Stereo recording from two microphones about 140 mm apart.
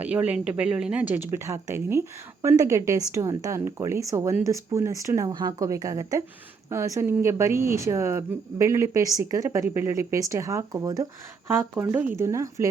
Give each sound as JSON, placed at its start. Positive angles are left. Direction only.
{"t": 0.0, "sound": "speech", "side_deg": -10}